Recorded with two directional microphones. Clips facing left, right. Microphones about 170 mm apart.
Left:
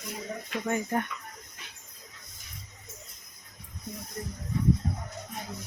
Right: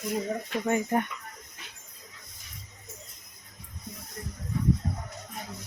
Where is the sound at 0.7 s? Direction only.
20° right (ahead or behind).